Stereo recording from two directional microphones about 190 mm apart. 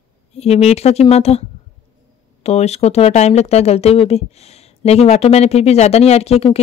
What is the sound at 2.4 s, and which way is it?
Speech, 35° left (ahead or behind).